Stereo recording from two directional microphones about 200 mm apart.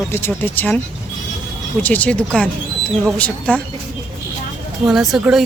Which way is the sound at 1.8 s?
10° left (ahead or behind).